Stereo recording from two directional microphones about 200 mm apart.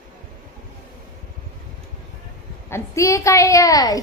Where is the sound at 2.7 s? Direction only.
15° left (ahead or behind).